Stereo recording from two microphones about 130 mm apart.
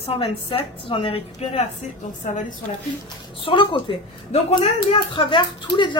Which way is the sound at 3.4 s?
40° left (ahead or behind).